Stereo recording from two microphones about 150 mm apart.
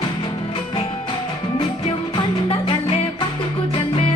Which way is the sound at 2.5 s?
35° left (ahead or behind).